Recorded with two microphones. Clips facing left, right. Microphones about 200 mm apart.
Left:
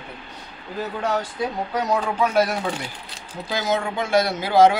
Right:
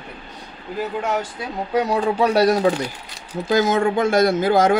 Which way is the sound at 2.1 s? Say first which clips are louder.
Right 6 dB; 35° right (ahead or behind).